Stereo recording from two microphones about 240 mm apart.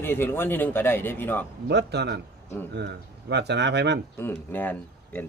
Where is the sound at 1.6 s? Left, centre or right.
Right.